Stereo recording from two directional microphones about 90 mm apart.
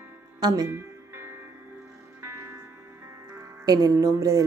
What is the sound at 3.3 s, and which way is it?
Speech, 45° right (ahead or behind).